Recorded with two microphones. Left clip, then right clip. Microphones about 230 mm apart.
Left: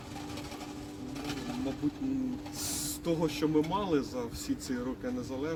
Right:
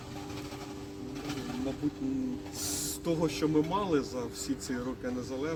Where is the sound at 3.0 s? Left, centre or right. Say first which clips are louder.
Even; centre.